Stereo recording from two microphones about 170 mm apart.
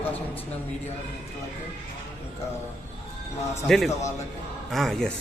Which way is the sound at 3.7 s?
Centre (ahead or behind).